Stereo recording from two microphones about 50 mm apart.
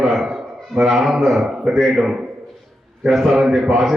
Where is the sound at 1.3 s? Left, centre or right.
Centre.